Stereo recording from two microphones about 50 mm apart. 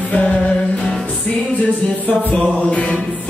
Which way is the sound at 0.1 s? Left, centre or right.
Left.